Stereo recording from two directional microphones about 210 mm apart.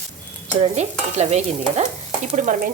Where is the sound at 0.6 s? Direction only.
30° right (ahead or behind).